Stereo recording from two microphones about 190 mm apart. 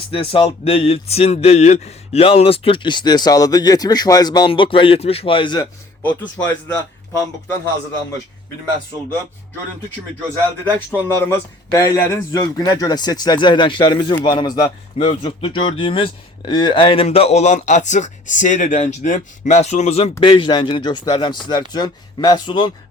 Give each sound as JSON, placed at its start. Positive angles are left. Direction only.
{"t": 0.1, "sound": "speech", "side_deg": 30}
{"t": 6.0, "sound": "speech", "side_deg": 10}
{"t": 10.7, "sound": "speech", "side_deg": 10}